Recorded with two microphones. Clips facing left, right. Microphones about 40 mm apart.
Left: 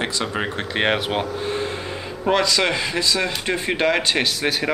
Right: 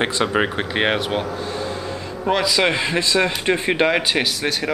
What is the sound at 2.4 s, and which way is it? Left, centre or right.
Speech, centre.